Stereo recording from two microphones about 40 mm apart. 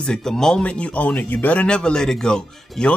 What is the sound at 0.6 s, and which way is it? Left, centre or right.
Speech, left.